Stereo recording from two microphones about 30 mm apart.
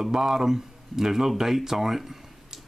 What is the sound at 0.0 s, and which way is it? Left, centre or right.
Speech, centre.